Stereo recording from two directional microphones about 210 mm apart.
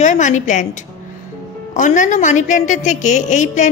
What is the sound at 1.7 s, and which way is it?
Speech, 35° left (ahead or behind).